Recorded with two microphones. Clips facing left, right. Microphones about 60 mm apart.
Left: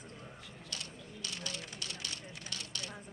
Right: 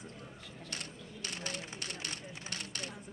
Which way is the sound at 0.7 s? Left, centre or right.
Right.